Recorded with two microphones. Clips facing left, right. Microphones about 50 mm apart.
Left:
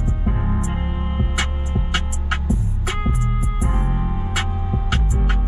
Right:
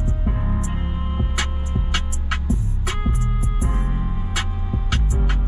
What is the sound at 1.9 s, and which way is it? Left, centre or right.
Music, centre.